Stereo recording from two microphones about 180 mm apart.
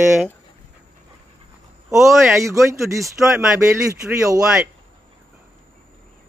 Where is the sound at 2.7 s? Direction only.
15° right (ahead or behind).